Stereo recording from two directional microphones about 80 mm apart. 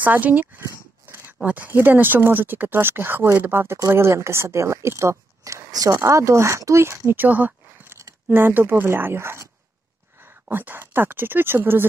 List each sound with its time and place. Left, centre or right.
0.0 s speech: right
0.6 s a sound: right
1.4 s speech: right
5.9 s speech: right